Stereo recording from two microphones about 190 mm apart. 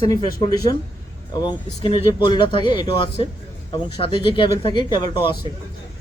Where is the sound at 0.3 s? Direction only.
20° left (ahead or behind).